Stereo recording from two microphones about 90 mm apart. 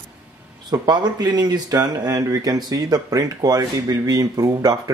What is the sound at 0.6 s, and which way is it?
Speech, 50° right (ahead or behind).